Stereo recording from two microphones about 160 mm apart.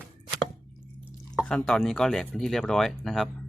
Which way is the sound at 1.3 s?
5° left (ahead or behind).